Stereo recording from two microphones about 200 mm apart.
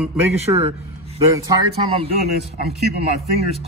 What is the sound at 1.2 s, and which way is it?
Speech, 15° right (ahead or behind).